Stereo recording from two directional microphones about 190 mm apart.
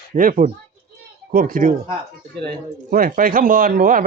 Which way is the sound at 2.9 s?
45° right (ahead or behind).